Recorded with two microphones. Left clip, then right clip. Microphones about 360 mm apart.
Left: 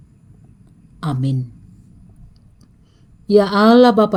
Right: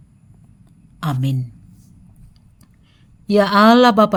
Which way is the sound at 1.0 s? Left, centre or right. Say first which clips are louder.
Even; right.